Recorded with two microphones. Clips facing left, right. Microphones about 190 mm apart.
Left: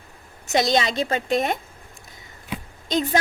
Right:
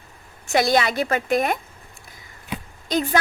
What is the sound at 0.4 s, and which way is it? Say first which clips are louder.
A woman's voice: right 1 dB; 20° left (ahead or behind).